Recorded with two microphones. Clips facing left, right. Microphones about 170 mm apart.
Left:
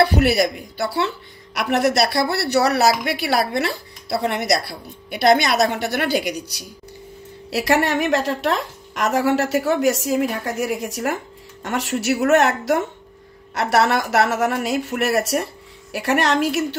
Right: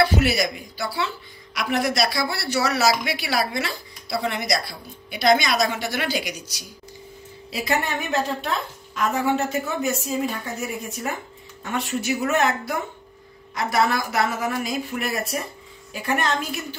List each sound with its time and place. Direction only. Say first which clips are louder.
0.0 s a woman's voice: left 4 dB; 60° left (ahead or behind)
7.5 s a woman's voice: left 6 dB; 85° left